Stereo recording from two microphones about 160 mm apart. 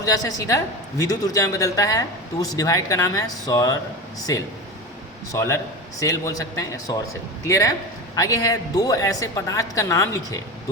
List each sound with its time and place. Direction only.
0.0 s a woman's voice: 20° left (ahead or behind)
5.3 s a woman's voice: 20° left (ahead or behind)